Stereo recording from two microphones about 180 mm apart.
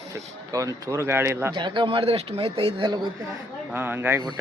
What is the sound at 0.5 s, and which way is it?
Speech, 20° right (ahead or behind).